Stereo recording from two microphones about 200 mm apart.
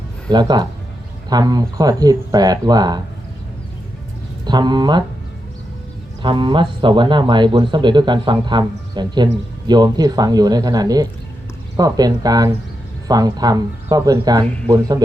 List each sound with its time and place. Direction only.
0.3 s speech: 20° right (ahead or behind)
4.4 s speech: 20° right (ahead or behind)
6.2 s speech: 25° right (ahead or behind)